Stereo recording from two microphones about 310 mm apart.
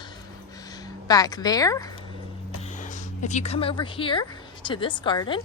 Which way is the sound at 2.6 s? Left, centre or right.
Left.